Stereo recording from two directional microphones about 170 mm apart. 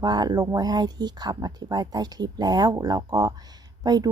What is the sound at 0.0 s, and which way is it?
Speech, 25° right (ahead or behind).